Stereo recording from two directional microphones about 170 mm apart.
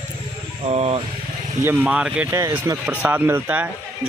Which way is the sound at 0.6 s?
35° right (ahead or behind).